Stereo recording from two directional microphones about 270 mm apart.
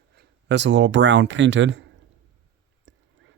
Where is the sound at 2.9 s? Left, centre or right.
Right.